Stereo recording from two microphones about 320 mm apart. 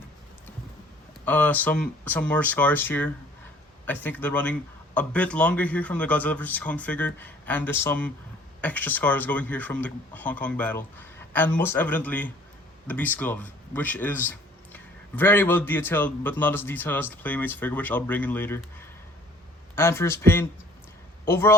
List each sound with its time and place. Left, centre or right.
1.2 s speech: centre
19.7 s a man's voice: centre